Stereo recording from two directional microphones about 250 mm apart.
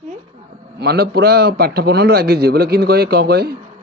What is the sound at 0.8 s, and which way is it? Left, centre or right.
A man's voice, right.